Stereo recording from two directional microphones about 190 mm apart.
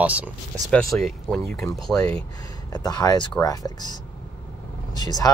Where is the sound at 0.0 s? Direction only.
5° right (ahead or behind); by 2.1 s 10° left (ahead or behind).